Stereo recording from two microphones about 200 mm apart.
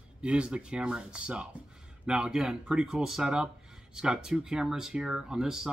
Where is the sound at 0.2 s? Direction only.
5° right (ahead or behind).